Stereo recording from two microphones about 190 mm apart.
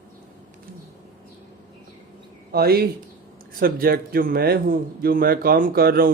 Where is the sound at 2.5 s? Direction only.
55° right (ahead or behind).